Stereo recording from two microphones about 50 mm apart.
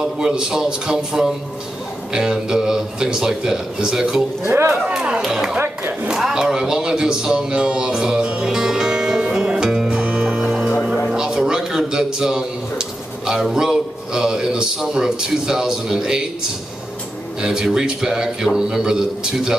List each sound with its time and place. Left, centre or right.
0.0 s a man's voice: centre
4.6 s speech: right
4.8 s a man's voice: centre
9.3 s music: centre
11.1 s a sound: centre
17.4 s a man's voice: centre